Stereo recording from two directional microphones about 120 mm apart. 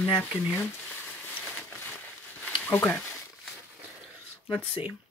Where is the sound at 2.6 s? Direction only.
15° left (ahead or behind).